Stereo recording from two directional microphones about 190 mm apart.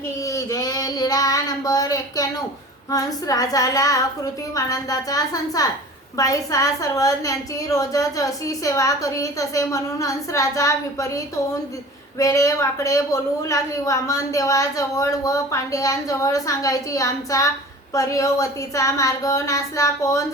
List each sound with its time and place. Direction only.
0.3 s child singing: 15° left (ahead or behind)
4.5 s a woman's voice: 20° left (ahead or behind)
12.2 s a woman's voice: 15° left (ahead or behind)